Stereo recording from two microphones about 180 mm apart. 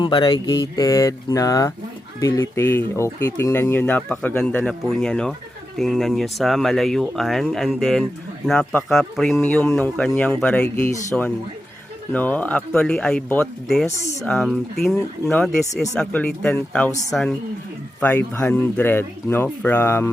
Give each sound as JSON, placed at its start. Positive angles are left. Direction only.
{"t": 0.0, "sound": "speech", "side_deg": 25}
{"t": 12.1, "sound": "speech", "side_deg": 10}
{"t": 18.3, "sound": "speech", "side_deg": 15}